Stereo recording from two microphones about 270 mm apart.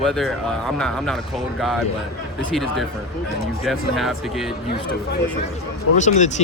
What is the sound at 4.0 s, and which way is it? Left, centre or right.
Speech, centre.